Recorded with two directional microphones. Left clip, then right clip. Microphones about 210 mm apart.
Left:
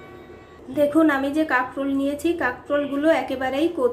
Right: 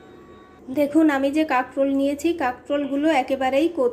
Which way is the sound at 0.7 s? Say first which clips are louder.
Left 1 dB; 25° right (ahead or behind).